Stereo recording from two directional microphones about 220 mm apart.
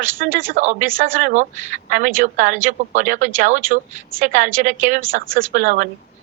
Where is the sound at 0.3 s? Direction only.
35° right (ahead or behind).